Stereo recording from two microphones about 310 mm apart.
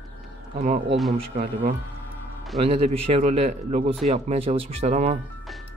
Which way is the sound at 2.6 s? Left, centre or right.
Centre.